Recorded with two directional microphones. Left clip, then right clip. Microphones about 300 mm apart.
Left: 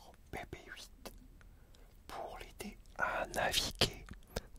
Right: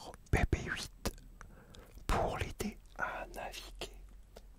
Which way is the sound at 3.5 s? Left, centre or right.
Left.